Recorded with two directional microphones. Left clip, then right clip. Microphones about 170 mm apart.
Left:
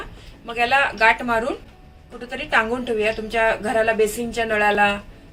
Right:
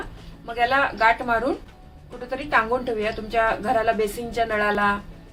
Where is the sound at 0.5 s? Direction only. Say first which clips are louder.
Left 2 dB; 45° right (ahead or behind).